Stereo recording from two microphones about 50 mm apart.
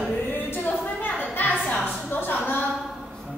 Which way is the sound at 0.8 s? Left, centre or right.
Left.